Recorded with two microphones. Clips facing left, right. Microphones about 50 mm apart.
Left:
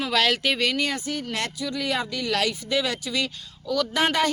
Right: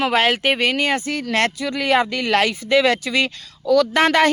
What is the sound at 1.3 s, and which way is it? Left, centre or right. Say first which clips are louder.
Speech: right 12 dB; right.